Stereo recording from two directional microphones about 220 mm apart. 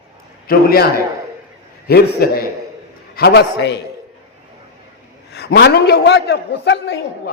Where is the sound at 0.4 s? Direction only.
45° left (ahead or behind).